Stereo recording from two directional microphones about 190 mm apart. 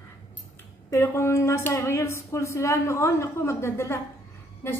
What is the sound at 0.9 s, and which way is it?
Speech, 15° left (ahead or behind).